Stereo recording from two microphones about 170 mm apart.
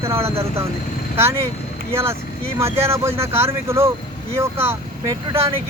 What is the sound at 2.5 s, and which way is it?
Speech, 15° right (ahead or behind).